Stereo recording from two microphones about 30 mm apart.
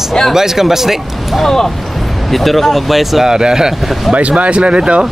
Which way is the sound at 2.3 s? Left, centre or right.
Centre.